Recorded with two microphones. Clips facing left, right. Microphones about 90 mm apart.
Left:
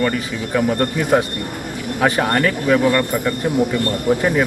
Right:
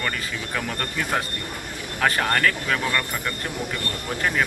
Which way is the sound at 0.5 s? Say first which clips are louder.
Left 12 dB; 15° left (ahead or behind).